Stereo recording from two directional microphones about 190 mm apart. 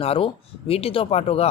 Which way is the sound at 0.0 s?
30° left (ahead or behind).